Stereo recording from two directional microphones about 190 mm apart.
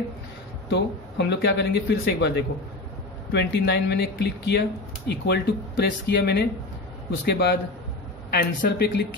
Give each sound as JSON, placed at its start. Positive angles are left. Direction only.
{"t": 0.7, "sound": "speech", "side_deg": 65}